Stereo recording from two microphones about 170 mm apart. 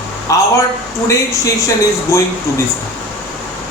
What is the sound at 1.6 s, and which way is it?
Speech, 15° left (ahead or behind).